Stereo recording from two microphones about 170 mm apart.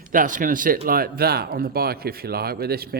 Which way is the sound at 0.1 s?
50° right (ahead or behind).